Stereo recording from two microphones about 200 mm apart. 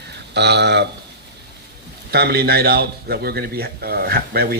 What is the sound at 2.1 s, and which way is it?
Speech, 50° right (ahead or behind).